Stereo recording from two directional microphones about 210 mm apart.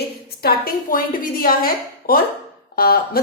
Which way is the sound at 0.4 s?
45° left (ahead or behind).